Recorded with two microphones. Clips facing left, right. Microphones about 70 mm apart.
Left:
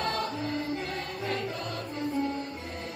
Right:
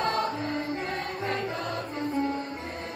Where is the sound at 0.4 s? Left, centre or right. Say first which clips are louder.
Right 1 dB; right.